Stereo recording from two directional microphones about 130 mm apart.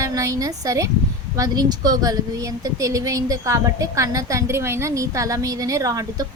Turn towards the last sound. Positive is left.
turn(degrees=-25)  # may be behind; listen again after turning